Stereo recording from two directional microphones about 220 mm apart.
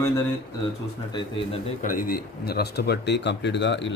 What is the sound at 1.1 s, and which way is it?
Speech, 20° left (ahead or behind).